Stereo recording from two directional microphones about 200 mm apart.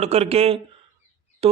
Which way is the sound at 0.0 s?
30° right (ahead or behind).